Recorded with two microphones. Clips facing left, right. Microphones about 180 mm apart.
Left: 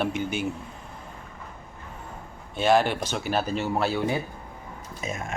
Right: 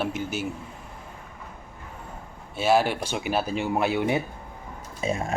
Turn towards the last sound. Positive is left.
turn(degrees=-30)  # may be behind; listen again after turning